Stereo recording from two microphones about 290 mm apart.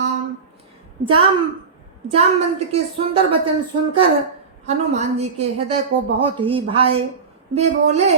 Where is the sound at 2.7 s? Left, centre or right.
Right.